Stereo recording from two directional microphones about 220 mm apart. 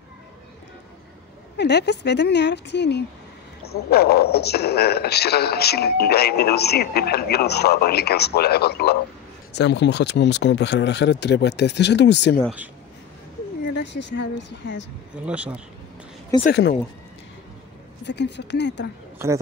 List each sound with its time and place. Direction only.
1.6 s a man's voice: 50° left (ahead or behind)
13.7 s a man's voice: 50° left (ahead or behind)
15.2 s speech: 5° right (ahead or behind)
16.3 s speech: 15° left (ahead or behind)
18.0 s a man's voice: 50° left (ahead or behind)
19.1 s a man's voice: 10° right (ahead or behind)